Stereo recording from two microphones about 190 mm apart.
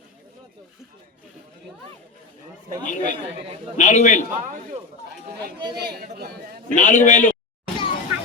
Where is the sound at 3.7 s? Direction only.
40° left (ahead or behind).